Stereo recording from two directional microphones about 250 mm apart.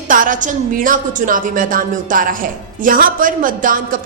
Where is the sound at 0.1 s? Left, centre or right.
Right.